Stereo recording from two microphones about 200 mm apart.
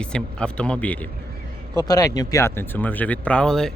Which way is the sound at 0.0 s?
5° left (ahead or behind).